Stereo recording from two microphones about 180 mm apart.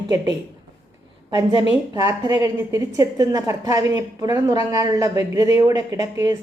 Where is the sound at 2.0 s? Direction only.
20° right (ahead or behind).